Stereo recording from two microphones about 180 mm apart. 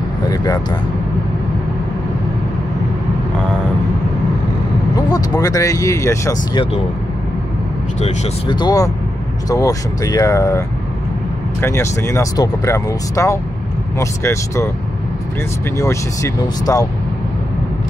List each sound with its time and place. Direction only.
4.9 s speech: 20° left (ahead or behind)
8.0 s speech: 25° left (ahead or behind)
11.6 s speech: 15° left (ahead or behind)
15.8 s speech: 15° left (ahead or behind)